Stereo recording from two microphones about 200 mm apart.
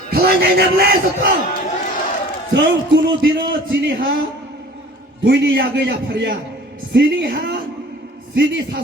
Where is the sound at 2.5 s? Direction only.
55° right (ahead or behind).